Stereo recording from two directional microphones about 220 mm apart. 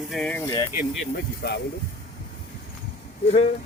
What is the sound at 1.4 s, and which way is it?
Speech, 45° left (ahead or behind).